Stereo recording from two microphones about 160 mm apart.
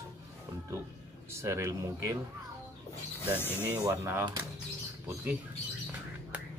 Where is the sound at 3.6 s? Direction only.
15° right (ahead or behind).